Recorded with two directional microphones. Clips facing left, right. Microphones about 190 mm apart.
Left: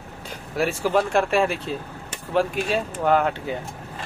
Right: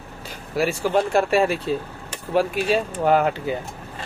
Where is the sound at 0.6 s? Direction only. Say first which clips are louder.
Right 1 dB; centre (ahead or behind).